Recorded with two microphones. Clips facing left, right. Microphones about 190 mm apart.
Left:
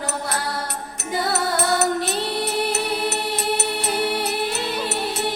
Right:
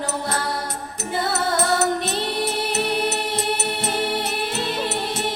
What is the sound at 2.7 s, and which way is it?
Music, 20° right (ahead or behind).